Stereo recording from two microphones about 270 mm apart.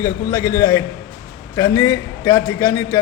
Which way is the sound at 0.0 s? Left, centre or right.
Centre.